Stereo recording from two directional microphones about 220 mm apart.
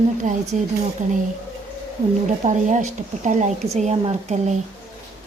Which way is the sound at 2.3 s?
35° right (ahead or behind).